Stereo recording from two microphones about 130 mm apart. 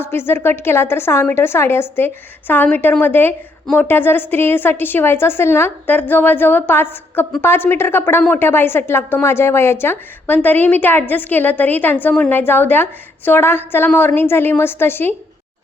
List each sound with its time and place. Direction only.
0.0 s a woman's voice: 15° left (ahead or behind)